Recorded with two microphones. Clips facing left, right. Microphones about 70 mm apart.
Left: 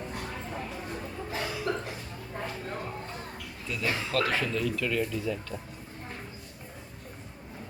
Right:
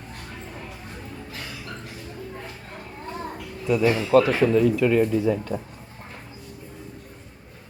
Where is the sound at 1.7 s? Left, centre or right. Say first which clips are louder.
Left 6 dB; centre.